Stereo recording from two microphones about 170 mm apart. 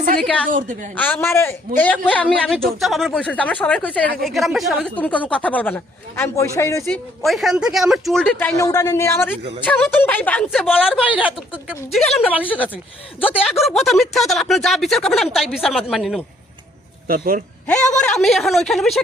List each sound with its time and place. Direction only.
0.2 s a woman's voice: 5° left (ahead or behind)
0.5 s a woman's voice: 50° right (ahead or behind)
0.9 s a woman's voice: 10° left (ahead or behind)
7.3 s a woman's voice: centre (ahead or behind)
13.4 s speech: centre (ahead or behind)
17.1 s speech: 60° right (ahead or behind)
17.9 s speech: 5° left (ahead or behind)